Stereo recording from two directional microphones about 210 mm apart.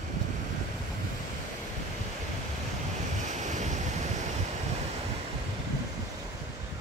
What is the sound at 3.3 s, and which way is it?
Waves, 35° right (ahead or behind).